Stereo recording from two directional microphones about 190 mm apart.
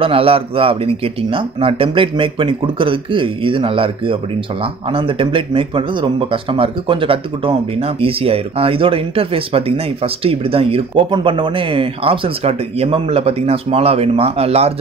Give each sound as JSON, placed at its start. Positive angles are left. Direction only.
{"t": 0.0, "sound": "speech", "side_deg": -30}